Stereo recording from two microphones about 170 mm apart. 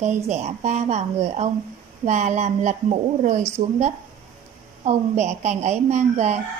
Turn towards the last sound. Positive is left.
turn(degrees=-40)  # may be behind; listen again after turning